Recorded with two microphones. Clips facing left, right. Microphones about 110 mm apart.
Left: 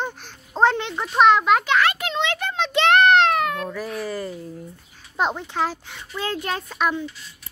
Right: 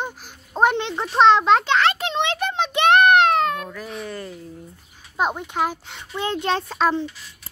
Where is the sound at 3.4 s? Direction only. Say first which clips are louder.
Right 2 dB; 25° right (ahead or behind).